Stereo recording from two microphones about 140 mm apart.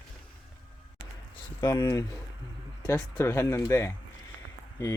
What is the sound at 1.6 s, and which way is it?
Speech, 30° left (ahead or behind).